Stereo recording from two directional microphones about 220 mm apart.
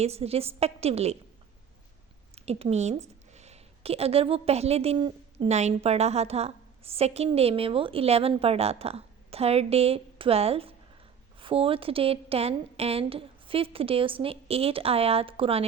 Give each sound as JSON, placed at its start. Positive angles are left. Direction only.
{"t": 0.0, "sound": "a woman's voice", "side_deg": -30}
{"t": 2.3, "sound": "a woman's voice", "side_deg": -30}